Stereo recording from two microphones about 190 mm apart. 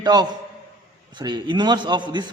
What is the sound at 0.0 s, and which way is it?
A man's voice, 20° right (ahead or behind).